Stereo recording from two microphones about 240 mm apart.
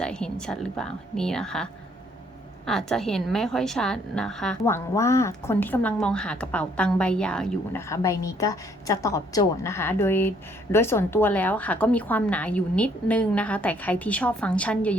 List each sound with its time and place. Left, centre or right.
0.0 s a woman's voice: centre
2.6 s a woman's voice: centre